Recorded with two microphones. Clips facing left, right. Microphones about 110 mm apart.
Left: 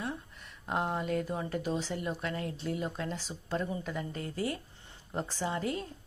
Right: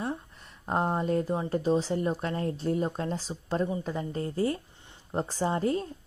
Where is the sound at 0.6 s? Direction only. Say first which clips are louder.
Right 5 dB; 30° right (ahead or behind).